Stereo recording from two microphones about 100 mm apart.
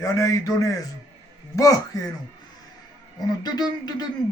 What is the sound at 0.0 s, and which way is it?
Speech, 35° left (ahead or behind).